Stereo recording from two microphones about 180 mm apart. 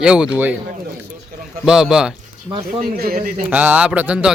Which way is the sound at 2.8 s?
55° right (ahead or behind).